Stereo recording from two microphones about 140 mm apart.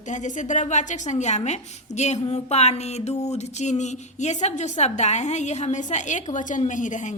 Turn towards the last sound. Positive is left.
turn(degrees=65)  # may be behind; listen again after turning